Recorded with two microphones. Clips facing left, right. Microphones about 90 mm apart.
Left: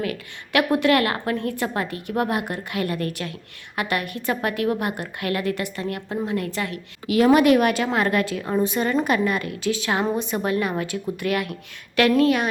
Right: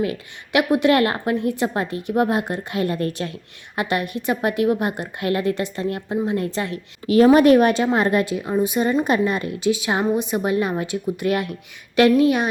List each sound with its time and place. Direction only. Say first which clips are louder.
0.0 s a woman's voice: right 4 dB; 25° right (ahead or behind)